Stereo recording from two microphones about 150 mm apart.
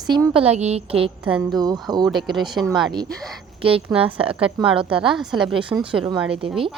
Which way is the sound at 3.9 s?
40° right (ahead or behind).